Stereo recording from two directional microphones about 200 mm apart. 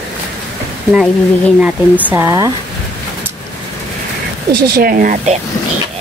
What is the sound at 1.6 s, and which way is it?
Speech, 10° right (ahead or behind).